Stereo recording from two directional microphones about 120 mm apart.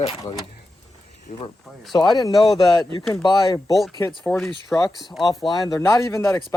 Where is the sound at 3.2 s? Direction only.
35° left (ahead or behind).